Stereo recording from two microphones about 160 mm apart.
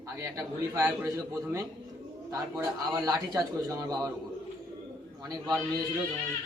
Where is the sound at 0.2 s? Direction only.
20° right (ahead or behind).